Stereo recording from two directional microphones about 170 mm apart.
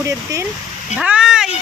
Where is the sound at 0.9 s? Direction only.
5° right (ahead or behind).